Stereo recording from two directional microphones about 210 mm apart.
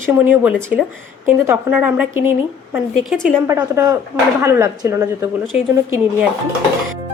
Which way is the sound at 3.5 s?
15° right (ahead or behind).